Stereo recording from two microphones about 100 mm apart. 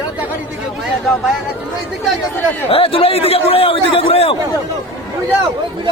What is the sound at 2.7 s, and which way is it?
A man's voice, 65° left (ahead or behind).